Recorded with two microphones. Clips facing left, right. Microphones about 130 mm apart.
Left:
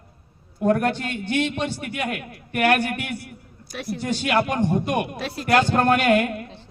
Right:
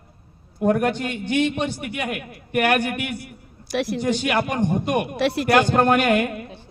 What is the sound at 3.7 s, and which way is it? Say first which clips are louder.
Speech: right 7 dB; 90° right.